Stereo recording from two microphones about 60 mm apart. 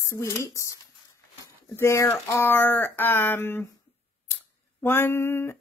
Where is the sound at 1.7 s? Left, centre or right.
Left.